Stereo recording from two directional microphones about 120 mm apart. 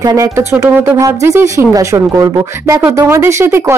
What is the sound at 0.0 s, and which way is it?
Speech, 30° right (ahead or behind).